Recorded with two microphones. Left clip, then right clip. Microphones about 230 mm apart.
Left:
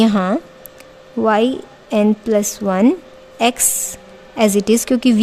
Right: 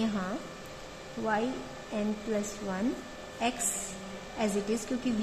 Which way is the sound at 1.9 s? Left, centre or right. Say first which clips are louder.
Left 18 dB; left.